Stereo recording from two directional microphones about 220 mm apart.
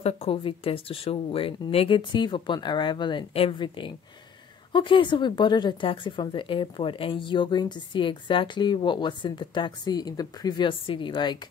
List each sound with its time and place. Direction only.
0.0 s speech: 25° left (ahead or behind)